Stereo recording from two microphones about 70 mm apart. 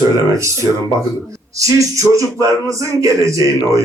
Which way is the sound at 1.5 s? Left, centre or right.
Right.